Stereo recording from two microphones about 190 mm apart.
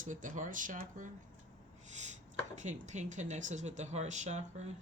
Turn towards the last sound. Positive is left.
turn(degrees=-35)  # may be behind; listen again after turning